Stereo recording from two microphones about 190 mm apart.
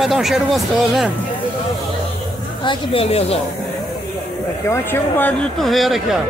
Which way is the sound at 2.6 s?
25° left (ahead or behind).